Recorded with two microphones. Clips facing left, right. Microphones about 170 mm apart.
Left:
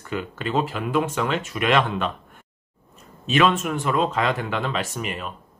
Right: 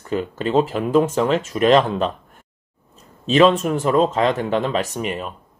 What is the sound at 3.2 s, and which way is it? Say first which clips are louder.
Speech: right 6 dB; 35° right (ahead or behind).